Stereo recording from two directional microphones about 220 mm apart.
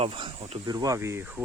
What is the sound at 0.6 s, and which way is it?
Speech, 15° right (ahead or behind).